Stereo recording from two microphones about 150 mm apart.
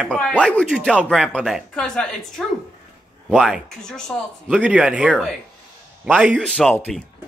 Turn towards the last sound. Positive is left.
turn(degrees=5)  # may be behind; listen again after turning